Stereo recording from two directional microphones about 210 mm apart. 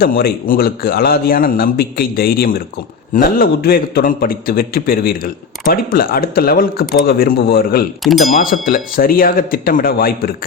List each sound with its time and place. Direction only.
0.0 s a man's voice: 45° left (ahead or behind)